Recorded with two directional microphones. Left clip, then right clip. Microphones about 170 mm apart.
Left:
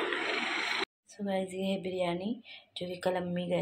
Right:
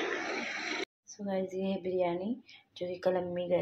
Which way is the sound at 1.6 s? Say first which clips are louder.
Right 1 dB; 5° right (ahead or behind).